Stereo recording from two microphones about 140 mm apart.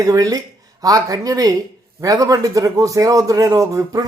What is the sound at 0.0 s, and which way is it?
A man's voice, 25° right (ahead or behind).